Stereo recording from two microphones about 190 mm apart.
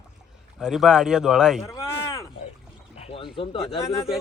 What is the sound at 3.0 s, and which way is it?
Speech, 30° left (ahead or behind).